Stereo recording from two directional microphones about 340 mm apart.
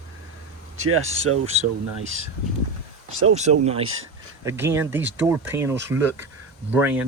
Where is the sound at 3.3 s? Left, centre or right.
Centre.